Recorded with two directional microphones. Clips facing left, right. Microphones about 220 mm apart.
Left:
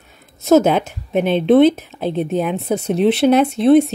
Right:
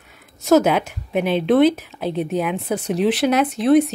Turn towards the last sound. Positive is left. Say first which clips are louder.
# left 3 dB
turn(degrees=25)  # may be behind; listen again after turning